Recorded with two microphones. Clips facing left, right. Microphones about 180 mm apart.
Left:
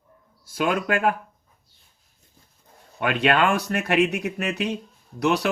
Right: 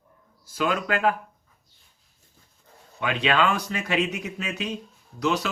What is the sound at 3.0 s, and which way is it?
Speech, 55° left (ahead or behind).